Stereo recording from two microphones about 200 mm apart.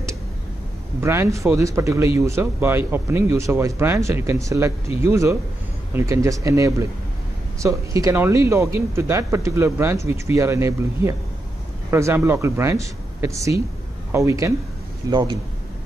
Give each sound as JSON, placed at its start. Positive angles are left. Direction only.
{"t": 1.0, "sound": "a man's voice", "side_deg": -15}